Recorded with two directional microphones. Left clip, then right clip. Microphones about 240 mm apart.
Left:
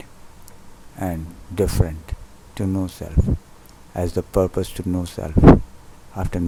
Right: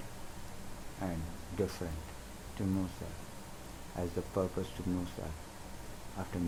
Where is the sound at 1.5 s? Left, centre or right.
Left.